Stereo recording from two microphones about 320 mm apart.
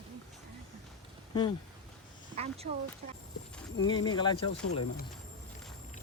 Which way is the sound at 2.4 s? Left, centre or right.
Centre.